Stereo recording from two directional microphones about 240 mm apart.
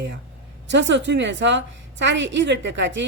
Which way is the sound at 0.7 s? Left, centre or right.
Right.